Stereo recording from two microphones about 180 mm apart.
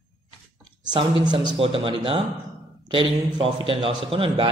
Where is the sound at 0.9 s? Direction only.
25° right (ahead or behind).